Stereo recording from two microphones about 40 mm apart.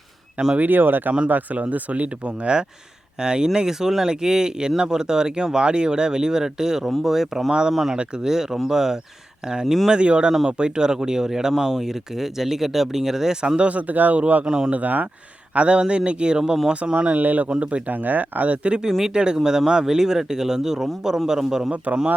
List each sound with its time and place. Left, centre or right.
0.4 s speech: right
0.7 s speech: right
1.3 s speech: right; by 13.4 s centre
13.6 s speech: right
14.4 s speech: right
14.7 s speech: right
15.5 s speech: right
17.2 s speech: right
17.6 s speech: right
17.9 s speech: right
18.7 s speech: centre